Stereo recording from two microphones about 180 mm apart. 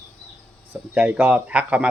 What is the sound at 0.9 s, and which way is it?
Speech, 10° right (ahead or behind).